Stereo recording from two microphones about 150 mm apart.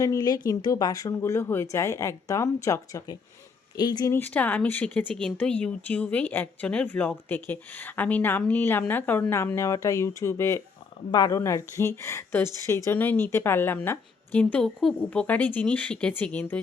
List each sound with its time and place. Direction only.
0.0 s speech: 25° left (ahead or behind)
4.1 s speech: 10° left (ahead or behind)